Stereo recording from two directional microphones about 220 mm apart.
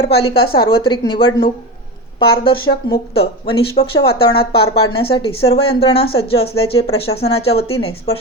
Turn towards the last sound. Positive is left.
turn(degrees=25)  # may be behind; listen again after turning